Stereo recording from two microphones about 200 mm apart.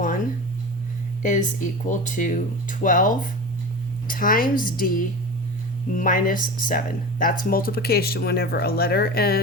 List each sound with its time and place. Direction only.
1.2 s speech: 40° left (ahead or behind)